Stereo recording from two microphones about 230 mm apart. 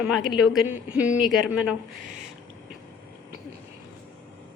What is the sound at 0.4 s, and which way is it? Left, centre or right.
Speech, centre.